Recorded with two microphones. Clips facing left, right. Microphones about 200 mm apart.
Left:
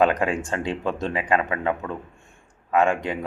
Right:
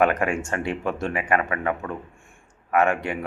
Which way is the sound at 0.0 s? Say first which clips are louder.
Left 1 dB; 15° left (ahead or behind).